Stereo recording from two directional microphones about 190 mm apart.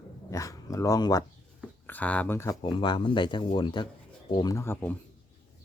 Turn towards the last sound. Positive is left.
turn(degrees=10)  # may be behind; listen again after turning